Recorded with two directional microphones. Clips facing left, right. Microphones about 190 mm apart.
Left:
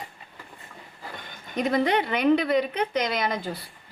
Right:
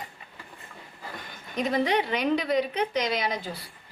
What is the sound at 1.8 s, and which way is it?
A woman's voice, 55° left (ahead or behind).